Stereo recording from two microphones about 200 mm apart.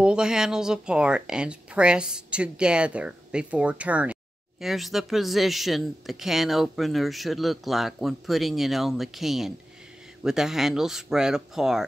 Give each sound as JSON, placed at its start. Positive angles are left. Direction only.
{"t": 0.0, "sound": "speech", "side_deg": -5}